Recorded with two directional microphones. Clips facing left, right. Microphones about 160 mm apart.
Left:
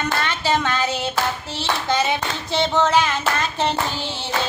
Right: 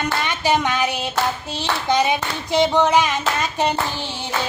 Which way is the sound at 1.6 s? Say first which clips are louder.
Right 2 dB; 15° right (ahead or behind).